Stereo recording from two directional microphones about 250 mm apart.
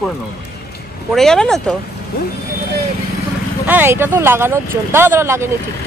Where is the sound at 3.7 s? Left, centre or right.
Centre.